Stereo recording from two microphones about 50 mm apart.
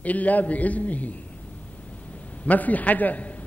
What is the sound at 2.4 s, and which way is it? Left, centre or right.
Speech, left.